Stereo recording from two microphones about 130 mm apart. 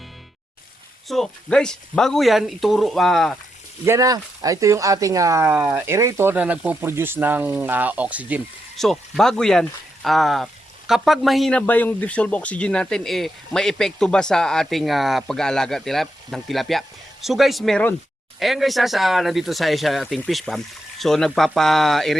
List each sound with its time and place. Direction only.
1.0 s speech: centre (ahead or behind)
3.8 s speech: 25° right (ahead or behind)
8.7 s speech: centre (ahead or behind)
11.6 s speech: 15° left (ahead or behind)